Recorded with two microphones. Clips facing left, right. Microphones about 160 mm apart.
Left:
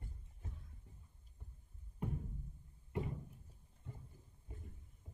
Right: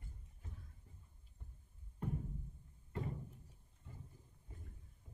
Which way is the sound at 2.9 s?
15° left (ahead or behind).